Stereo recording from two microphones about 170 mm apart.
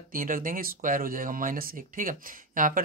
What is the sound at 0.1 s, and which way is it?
Speech, 55° right (ahead or behind).